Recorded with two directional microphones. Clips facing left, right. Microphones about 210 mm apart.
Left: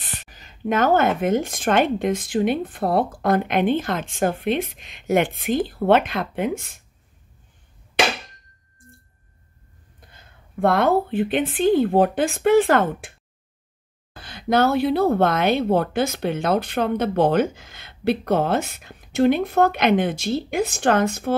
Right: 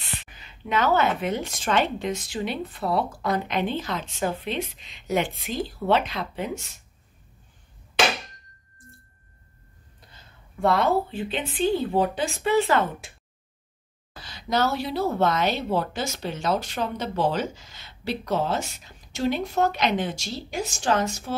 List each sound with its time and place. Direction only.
0.0 s speech: 40° left (ahead or behind)
9.9 s speech: 55° left (ahead or behind)
14.1 s speech: 55° left (ahead or behind)